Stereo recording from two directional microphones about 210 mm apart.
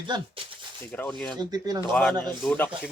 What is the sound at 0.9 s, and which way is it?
Speech, 10° left (ahead or behind).